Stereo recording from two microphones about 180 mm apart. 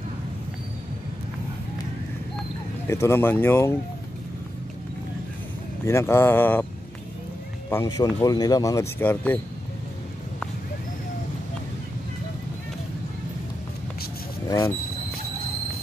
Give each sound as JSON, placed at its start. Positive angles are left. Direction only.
{"t": 2.9, "sound": "speech", "side_deg": 15}
{"t": 5.9, "sound": "speech", "side_deg": 15}
{"t": 7.7, "sound": "speech", "side_deg": 20}